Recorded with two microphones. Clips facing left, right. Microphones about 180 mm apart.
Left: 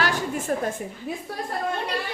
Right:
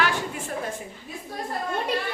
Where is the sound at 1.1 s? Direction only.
65° left (ahead or behind).